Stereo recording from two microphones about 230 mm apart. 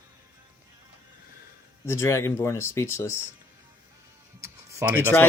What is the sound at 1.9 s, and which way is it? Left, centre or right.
Speech, centre.